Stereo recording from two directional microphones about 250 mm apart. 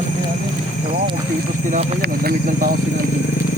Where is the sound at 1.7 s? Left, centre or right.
Right.